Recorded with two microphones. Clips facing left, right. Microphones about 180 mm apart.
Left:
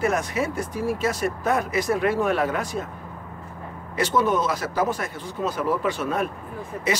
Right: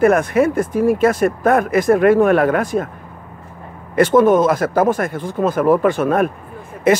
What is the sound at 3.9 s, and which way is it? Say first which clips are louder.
Speech: right 10 dB; 50° right (ahead or behind).